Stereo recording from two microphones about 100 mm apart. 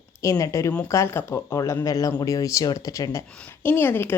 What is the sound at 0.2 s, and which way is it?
Speech, 35° left (ahead or behind).